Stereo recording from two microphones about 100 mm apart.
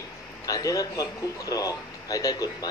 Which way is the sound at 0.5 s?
35° left (ahead or behind).